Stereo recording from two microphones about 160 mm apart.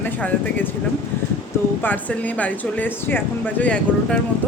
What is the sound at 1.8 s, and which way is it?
Speech, 10° left (ahead or behind).